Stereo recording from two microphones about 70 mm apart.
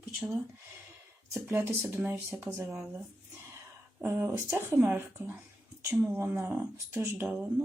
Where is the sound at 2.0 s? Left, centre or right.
Right.